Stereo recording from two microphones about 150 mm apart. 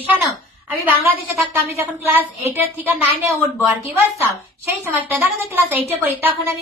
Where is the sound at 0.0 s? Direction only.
10° right (ahead or behind).